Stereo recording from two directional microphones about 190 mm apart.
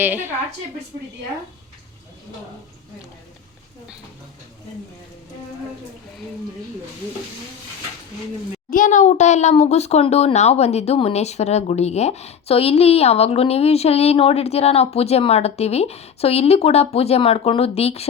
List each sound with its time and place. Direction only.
0.0 s a woman's voice: 10° right (ahead or behind)
8.7 s speech: 40° left (ahead or behind)